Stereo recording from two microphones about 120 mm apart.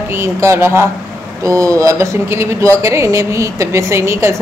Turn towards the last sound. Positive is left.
turn(degrees=-20)  # may be behind; listen again after turning